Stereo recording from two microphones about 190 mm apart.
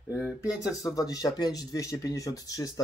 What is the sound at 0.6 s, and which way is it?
Speech, 20° left (ahead or behind).